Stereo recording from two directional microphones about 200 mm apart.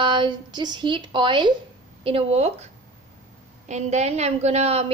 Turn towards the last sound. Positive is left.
turn(degrees=-30)  # may be behind; listen again after turning